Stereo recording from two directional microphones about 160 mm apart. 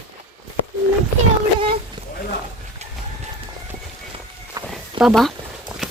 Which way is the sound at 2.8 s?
45° right (ahead or behind).